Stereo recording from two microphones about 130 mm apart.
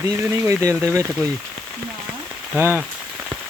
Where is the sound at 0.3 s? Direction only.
25° right (ahead or behind).